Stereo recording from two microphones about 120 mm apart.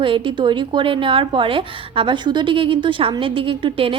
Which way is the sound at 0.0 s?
45° right (ahead or behind).